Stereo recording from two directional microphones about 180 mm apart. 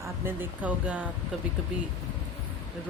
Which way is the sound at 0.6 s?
5° right (ahead or behind).